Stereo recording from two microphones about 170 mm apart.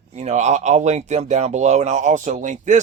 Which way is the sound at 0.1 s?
40° right (ahead or behind).